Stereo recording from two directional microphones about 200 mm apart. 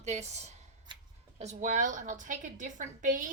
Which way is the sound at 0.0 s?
35° right (ahead or behind).